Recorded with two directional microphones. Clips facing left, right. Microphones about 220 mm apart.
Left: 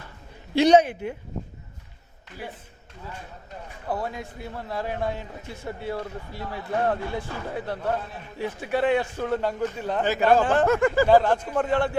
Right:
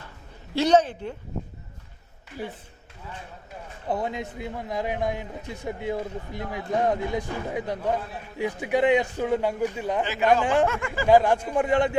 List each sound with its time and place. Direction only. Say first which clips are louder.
0.5 s speech: left 3 dB; 15° left (ahead or behind)
3.8 s a man's voice: right 2 dB; 20° right (ahead or behind)
10.7 s speech: left 8 dB; 40° left (ahead or behind)
11.1 s a man's voice: even; 10° right (ahead or behind)